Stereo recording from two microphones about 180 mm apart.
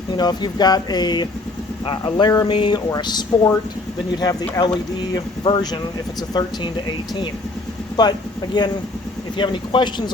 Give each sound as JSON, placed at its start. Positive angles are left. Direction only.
{"t": 0.2, "sound": "speech", "side_deg": 25}
{"t": 8.0, "sound": "speech", "side_deg": 25}
{"t": 9.4, "sound": "speech", "side_deg": 25}